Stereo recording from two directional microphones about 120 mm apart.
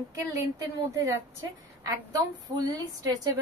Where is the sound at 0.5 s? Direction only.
25° right (ahead or behind).